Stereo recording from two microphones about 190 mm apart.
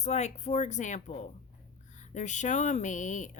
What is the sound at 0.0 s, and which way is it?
Speech, 35° left (ahead or behind).